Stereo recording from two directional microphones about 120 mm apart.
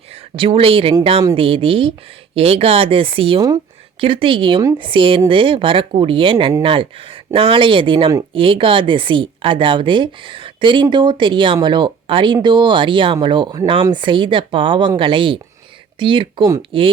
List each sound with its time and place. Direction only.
0.3 s a woman's voice: 50° right (ahead or behind)